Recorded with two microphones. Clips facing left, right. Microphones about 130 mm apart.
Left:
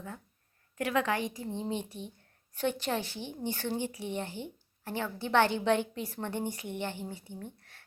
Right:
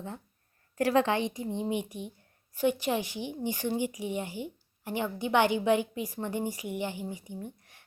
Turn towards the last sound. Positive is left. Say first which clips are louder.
# right 3 dB
turn(degrees=-15)  # may be behind; listen again after turning